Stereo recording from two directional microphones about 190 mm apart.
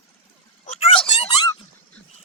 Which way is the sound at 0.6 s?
30° left (ahead or behind).